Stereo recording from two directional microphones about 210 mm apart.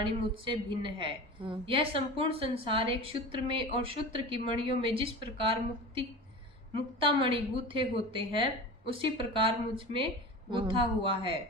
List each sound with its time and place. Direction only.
0.0 s a woman's voice: 25° right (ahead or behind)